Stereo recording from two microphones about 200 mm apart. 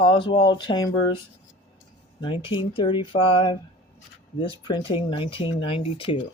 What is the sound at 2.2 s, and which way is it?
Speech, 25° left (ahead or behind).